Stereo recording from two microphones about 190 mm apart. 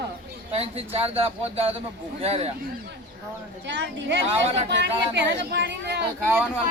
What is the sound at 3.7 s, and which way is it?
Speech, 65° right (ahead or behind).